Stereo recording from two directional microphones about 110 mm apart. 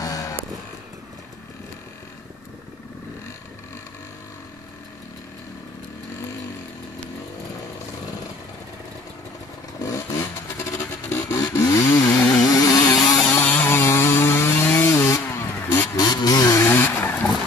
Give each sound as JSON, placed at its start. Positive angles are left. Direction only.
{"t": 0.0, "sound": "vehicle", "side_deg": 35}
{"t": 9.8, "sound": "vehicle", "side_deg": 25}
{"t": 12.2, "sound": "chainsaw", "side_deg": 10}
{"t": 12.4, "sound": "vehicle", "side_deg": 35}
{"t": 13.2, "sound": "chainsaw", "side_deg": 15}
{"t": 15.0, "sound": "vehicle", "side_deg": 25}
{"t": 16.0, "sound": "vehicle", "side_deg": 40}
{"t": 16.7, "sound": "vehicle", "side_deg": 20}